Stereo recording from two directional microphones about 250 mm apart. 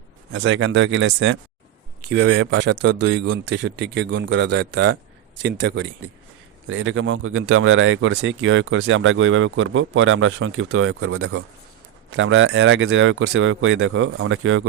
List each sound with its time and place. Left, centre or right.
0.3 s speech: right
2.0 s speech: right